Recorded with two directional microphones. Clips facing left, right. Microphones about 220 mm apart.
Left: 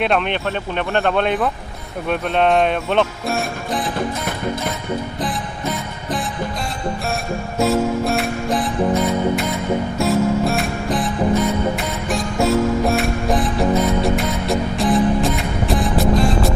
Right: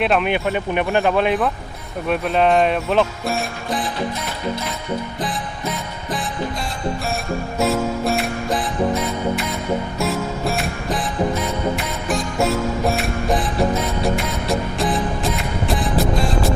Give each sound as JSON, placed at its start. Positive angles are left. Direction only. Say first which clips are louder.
{"t": 0.0, "sound": "music", "louder": "right 1 dB", "side_deg": -5}
{"t": 7.6, "sound": "music", "louder": "left 3 dB", "side_deg": 0}